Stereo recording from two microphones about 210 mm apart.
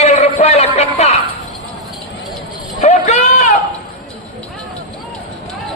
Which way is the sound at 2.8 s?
35° left (ahead or behind).